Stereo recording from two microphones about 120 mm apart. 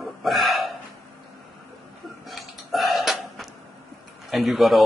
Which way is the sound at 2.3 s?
Centre (ahead or behind).